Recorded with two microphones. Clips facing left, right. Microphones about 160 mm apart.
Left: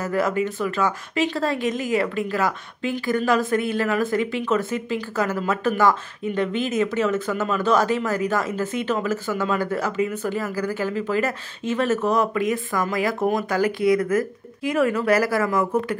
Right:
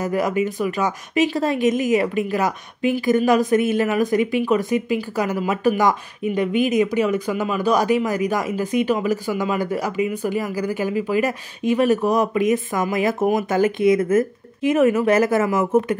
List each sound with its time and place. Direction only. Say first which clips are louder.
0.0 s speech: right 2 dB; 15° right (ahead or behind)